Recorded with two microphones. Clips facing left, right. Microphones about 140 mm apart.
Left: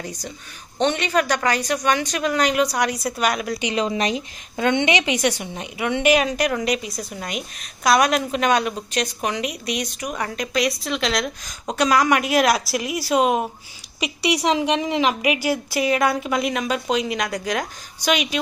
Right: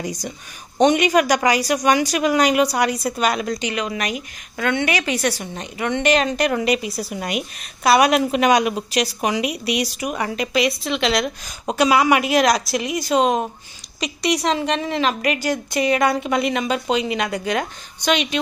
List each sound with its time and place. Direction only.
0.0 s a woman's voice: 15° right (ahead or behind)
3.7 s a woman's voice: 25° left (ahead or behind); by 18.4 s 5° left (ahead or behind)